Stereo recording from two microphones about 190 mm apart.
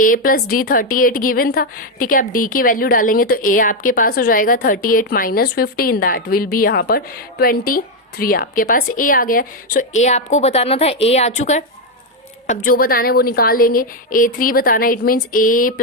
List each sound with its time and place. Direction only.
0.0 s a woman's voice: 45° left (ahead or behind)
10.0 s a woman's voice: 35° left (ahead or behind)
12.5 s a woman's voice: 50° left (ahead or behind)